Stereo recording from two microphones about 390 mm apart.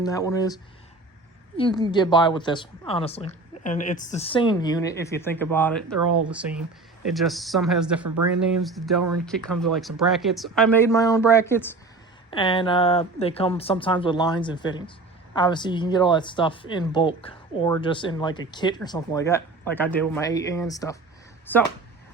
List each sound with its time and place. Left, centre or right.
0.0 s speech: centre
1.5 s speech: centre
9.0 s speech: right
9.2 s speech: centre